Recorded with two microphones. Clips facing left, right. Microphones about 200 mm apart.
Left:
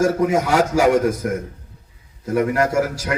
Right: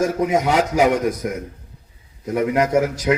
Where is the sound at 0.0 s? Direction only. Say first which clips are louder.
Left 1 dB; 20° right (ahead or behind).